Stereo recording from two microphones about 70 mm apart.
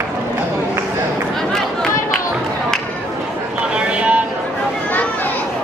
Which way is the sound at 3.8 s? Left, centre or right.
Centre.